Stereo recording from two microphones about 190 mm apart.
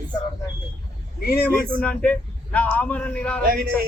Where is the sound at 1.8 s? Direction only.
5° left (ahead or behind).